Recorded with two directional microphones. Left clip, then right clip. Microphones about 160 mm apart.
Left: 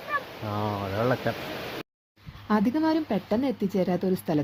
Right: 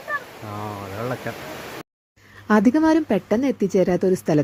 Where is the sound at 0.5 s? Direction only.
25° left (ahead or behind).